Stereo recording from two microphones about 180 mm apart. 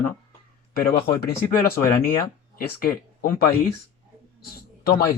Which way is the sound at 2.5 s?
55° left (ahead or behind).